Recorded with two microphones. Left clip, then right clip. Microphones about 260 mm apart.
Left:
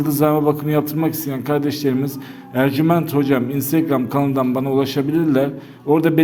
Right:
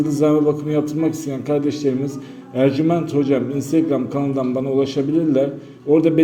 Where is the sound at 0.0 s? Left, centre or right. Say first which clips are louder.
Even; left.